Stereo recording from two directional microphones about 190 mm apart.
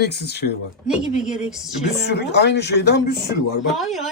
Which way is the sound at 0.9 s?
5° right (ahead or behind).